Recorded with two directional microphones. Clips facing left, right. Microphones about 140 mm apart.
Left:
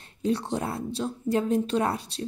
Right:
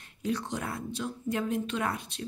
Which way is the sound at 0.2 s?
30° left (ahead or behind).